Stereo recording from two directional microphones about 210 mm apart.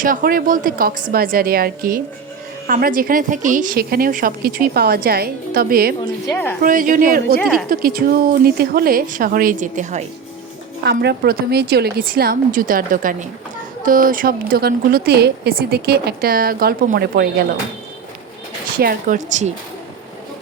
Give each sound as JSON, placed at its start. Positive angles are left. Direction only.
{"t": 0.0, "sound": "a woman's voice", "side_deg": -40}
{"t": 6.2, "sound": "a woman's voice", "side_deg": 10}
{"t": 6.6, "sound": "speech", "side_deg": -40}
{"t": 7.3, "sound": "a woman's voice", "side_deg": 0}
{"t": 7.7, "sound": "a woman's voice", "side_deg": -45}
{"t": 10.8, "sound": "a woman's voice", "side_deg": -50}
{"t": 18.8, "sound": "speech", "side_deg": -40}